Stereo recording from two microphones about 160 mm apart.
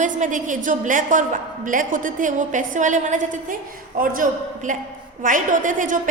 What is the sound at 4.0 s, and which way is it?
A woman's voice, 60° right (ahead or behind).